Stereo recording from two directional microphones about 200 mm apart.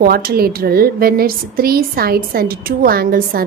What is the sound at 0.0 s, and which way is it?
A woman's voice, 50° right (ahead or behind).